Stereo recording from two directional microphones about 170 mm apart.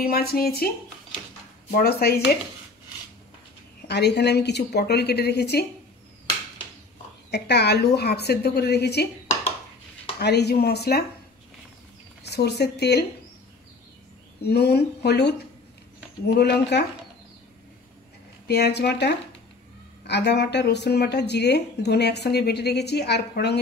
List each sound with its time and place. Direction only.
0.0 s speech: 65° left (ahead or behind)
1.8 s speech: 65° left (ahead or behind)
3.8 s speech: 80° left
7.2 s speech: 75° left (ahead or behind)
10.1 s speech: 80° left
12.2 s a woman's voice: 75° left (ahead or behind)
14.4 s speech: 75° left (ahead or behind)
18.5 s speech: 75° left (ahead or behind)